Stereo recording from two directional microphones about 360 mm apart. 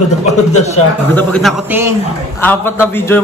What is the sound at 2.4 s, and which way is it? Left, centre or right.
Speech, centre.